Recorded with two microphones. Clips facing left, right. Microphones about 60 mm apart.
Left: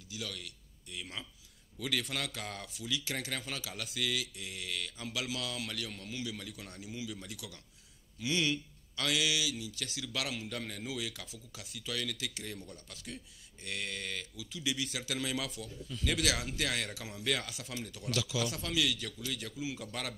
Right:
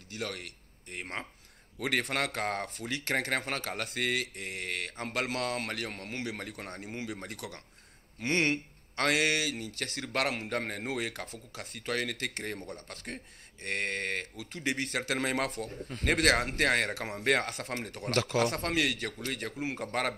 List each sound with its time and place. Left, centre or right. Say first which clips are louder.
0.1 s speech: right 5 dB; right